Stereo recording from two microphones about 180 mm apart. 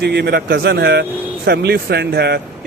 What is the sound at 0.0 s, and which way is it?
Speech, 70° right (ahead or behind).